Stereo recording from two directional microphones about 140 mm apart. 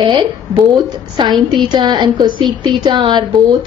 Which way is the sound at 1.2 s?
30° right (ahead or behind).